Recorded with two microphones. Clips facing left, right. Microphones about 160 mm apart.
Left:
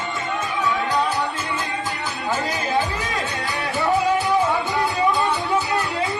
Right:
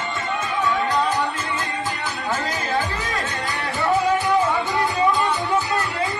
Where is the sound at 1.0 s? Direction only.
15° left (ahead or behind).